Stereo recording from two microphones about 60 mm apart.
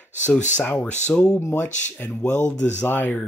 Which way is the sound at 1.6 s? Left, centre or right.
Left.